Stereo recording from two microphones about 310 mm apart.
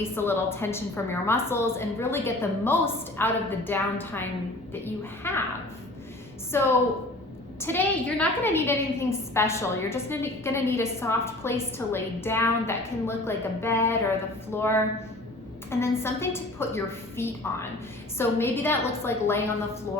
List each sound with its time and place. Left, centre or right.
0.2 s a woman's voice: centre
6.5 s a woman's voice: centre